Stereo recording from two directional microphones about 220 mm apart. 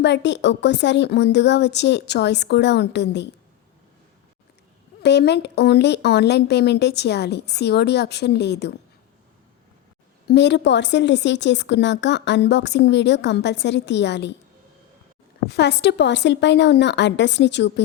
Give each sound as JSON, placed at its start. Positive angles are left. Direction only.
{"t": 0.0, "sound": "a woman's voice", "side_deg": 50}
{"t": 5.0, "sound": "a woman's voice", "side_deg": 50}
{"t": 10.2, "sound": "a woman's voice", "side_deg": 50}
{"t": 15.4, "sound": "a woman's voice", "side_deg": 50}